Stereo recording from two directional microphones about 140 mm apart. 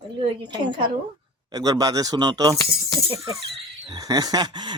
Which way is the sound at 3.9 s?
25° right (ahead or behind).